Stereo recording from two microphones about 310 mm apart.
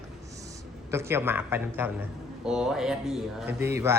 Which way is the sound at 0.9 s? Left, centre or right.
Centre.